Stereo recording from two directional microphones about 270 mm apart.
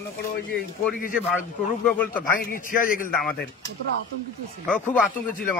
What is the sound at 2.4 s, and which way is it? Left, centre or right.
Speech, left.